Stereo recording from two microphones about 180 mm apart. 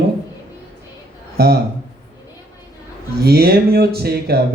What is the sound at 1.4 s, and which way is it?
Speech, 60° right (ahead or behind).